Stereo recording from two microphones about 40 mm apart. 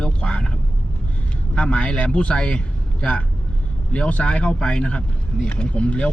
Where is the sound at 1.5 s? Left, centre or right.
Left.